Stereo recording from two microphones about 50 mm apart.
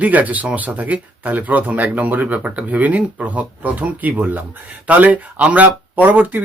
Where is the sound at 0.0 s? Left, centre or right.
Right.